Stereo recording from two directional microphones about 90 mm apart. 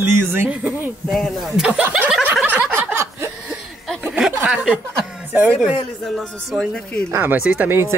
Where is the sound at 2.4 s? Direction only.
20° right (ahead or behind).